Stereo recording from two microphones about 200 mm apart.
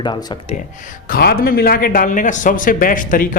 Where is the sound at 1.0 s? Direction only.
50° left (ahead or behind).